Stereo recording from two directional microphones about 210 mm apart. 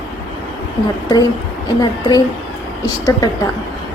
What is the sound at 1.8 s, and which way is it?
Speech, 20° left (ahead or behind).